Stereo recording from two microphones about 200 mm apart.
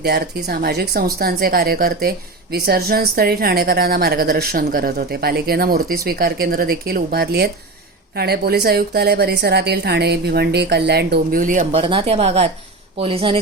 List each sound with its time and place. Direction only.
0.0 s speech: 50° right (ahead or behind); by 13.4 s 25° right (ahead or behind)